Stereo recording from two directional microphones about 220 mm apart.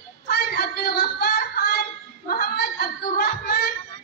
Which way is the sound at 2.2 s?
45° left (ahead or behind).